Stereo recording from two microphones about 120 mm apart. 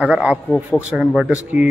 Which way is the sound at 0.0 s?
10° right (ahead or behind).